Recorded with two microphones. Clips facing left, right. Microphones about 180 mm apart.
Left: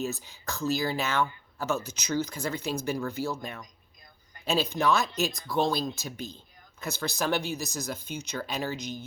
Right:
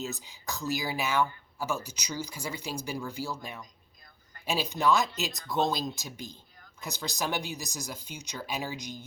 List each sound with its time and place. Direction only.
0.1 s speech: 15° right (ahead or behind)
4.4 s speech: 15° right (ahead or behind)